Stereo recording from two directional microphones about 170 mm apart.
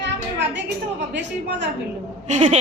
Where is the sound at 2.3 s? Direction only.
45° right (ahead or behind).